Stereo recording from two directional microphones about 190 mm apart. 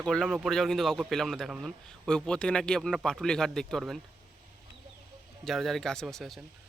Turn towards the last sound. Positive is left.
turn(degrees=0)  # may be behind; listen again after turning